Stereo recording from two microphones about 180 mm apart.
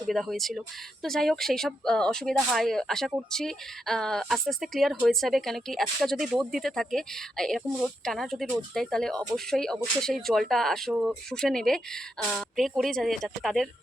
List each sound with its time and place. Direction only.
0.1 s speech: centre (ahead or behind)